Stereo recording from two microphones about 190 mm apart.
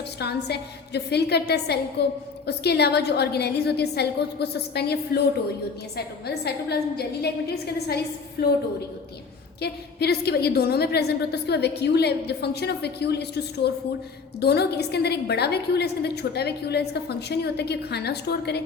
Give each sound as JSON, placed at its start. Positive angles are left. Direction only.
{"t": 0.2, "sound": "a woman's voice", "side_deg": 60}
{"t": 6.2, "sound": "a woman's voice", "side_deg": 55}
{"t": 9.6, "sound": "a woman's voice", "side_deg": 60}